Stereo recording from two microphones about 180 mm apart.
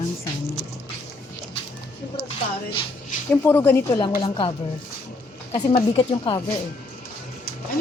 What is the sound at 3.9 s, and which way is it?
Speech, 25° left (ahead or behind).